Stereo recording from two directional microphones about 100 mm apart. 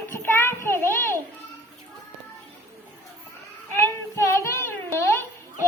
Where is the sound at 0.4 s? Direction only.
25° left (ahead or behind).